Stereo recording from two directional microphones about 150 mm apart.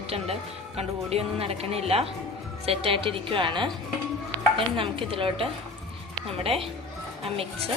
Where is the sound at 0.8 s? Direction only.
40° right (ahead or behind).